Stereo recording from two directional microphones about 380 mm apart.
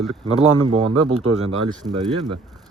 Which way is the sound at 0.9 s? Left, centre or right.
Right.